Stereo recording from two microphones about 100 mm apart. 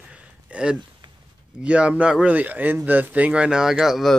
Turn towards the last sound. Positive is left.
turn(degrees=-5)  # may be behind; listen again after turning